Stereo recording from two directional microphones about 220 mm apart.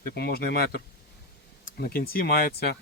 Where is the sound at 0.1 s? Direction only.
45° left (ahead or behind).